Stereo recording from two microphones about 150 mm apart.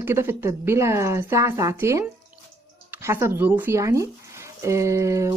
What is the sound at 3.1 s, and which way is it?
Speech, 15° right (ahead or behind).